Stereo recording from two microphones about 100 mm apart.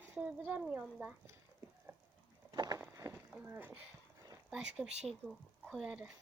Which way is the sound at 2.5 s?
45° right (ahead or behind).